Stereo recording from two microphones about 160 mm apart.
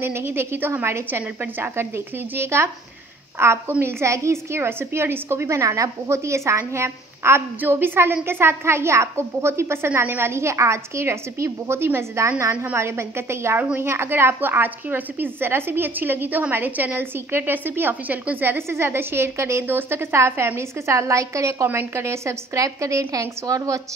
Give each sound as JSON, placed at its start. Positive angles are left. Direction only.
{"t": 0.0, "sound": "a woman's voice", "side_deg": -15}